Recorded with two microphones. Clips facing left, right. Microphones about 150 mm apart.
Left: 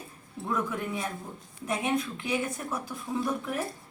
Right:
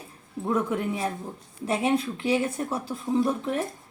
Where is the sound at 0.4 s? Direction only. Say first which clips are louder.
Right 5 dB; 30° right (ahead or behind).